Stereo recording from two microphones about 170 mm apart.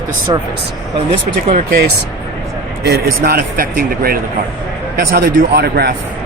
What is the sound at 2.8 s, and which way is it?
A man's voice, 60° right (ahead or behind).